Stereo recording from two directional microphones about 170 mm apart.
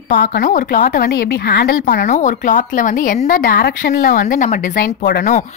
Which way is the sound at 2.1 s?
45° left (ahead or behind).